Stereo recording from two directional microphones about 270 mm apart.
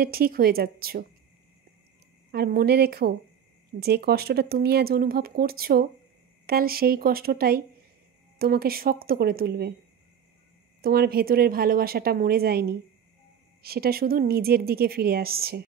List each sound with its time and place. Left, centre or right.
0.0 s speech: right
2.3 s speech: right
10.8 s speech: right